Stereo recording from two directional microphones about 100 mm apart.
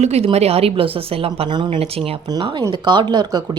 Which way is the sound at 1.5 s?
50° right (ahead or behind).